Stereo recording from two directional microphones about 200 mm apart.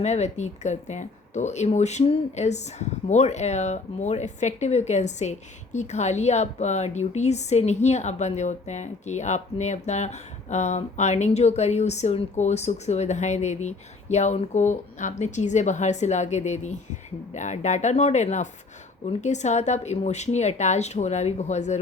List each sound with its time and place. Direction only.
0.0 s speech: 35° left (ahead or behind)